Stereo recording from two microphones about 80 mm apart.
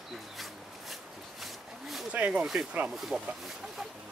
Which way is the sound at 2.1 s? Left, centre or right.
Centre.